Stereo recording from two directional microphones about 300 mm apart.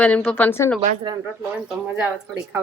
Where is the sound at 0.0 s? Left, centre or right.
Centre.